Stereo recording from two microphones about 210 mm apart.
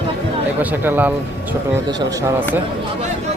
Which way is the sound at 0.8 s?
10° right (ahead or behind).